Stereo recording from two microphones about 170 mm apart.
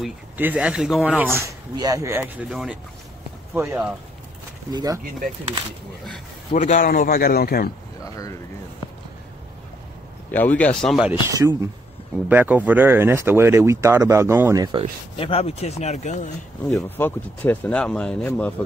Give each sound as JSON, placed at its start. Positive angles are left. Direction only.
{"t": 0.4, "sound": "speech", "side_deg": -10}
{"t": 6.5, "sound": "speech", "side_deg": 45}
{"t": 8.0, "sound": "speech", "side_deg": 20}
{"t": 10.3, "sound": "speech", "side_deg": 10}
{"t": 11.2, "sound": "speech", "side_deg": -20}
{"t": 15.1, "sound": "speech", "side_deg": 35}
{"t": 16.9, "sound": "speech", "side_deg": 10}